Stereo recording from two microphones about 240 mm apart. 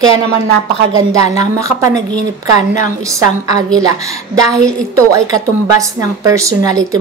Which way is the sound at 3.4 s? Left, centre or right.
Centre.